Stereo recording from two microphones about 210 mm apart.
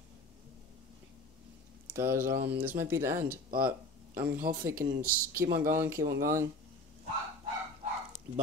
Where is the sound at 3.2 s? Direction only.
45° right (ahead or behind).